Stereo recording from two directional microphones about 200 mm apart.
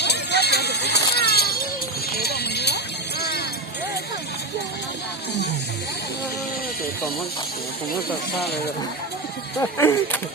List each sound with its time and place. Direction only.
0.0 s a sound: 55° left (ahead or behind)
2.1 s clip-clop: 55° left (ahead or behind)
9.6 s speech: 10° left (ahead or behind)